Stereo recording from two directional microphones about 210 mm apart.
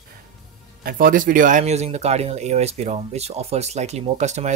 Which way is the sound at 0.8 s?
40° right (ahead or behind).